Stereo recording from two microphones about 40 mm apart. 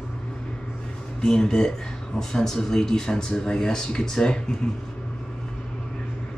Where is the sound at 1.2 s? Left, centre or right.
Centre.